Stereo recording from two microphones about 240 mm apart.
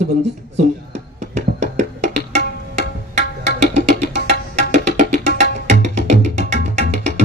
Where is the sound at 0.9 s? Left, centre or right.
Right.